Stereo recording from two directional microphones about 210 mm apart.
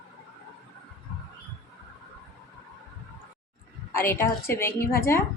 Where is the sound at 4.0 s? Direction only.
10° left (ahead or behind).